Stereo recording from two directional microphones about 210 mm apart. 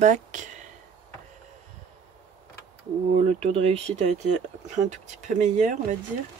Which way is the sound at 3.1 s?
30° right (ahead or behind).